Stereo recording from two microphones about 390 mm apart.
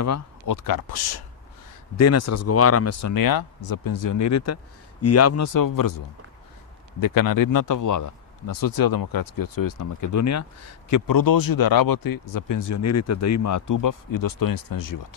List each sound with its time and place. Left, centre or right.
0.0 s speech: left
0.7 s speech: left
2.0 s speech: left